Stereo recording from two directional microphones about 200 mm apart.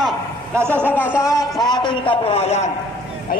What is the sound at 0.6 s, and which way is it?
Speech, 10° right (ahead or behind).